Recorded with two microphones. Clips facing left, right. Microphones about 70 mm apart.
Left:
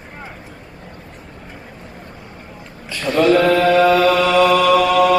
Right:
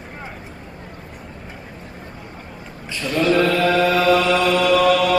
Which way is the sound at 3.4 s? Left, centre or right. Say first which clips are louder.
Left 4 dB; left.